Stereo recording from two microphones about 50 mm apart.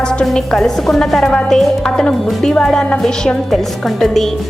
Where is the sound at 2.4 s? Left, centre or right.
Centre.